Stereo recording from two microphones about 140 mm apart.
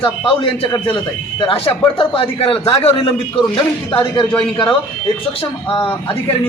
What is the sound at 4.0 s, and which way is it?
Speech, 35° left (ahead or behind).